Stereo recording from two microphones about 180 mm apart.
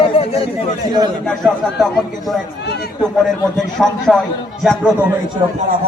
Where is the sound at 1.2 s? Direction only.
5° left (ahead or behind).